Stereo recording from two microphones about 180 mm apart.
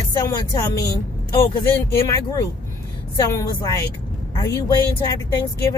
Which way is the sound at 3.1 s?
20° left (ahead or behind).